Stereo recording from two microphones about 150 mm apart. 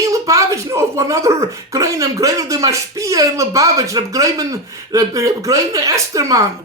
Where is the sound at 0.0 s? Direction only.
20° right (ahead or behind).